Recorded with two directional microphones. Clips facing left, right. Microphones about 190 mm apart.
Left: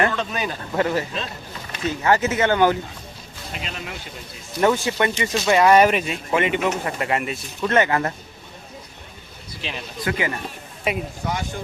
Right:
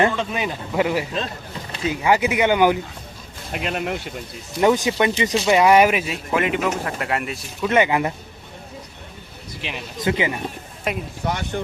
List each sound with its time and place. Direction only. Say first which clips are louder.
0.1 s speech: right 1 dB; 10° right (ahead or behind)
3.5 s speech: right 9 dB; 60° right (ahead or behind)
4.6 s speech: right 2 dB; 15° right (ahead or behind); by 7.7 s centre (ahead or behind)
7.7 s speech: right 1 dB; 15° right (ahead or behind)
9.6 s speech: right 1 dB; 15° right (ahead or behind)
10.9 s speech: left 1 dB; centre (ahead or behind)
11.5 s speech: right 6 dB; 55° right (ahead or behind)